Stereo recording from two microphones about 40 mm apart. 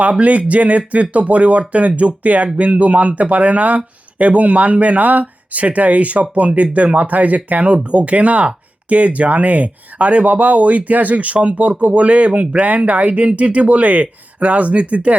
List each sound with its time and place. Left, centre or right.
0.0 s speech: right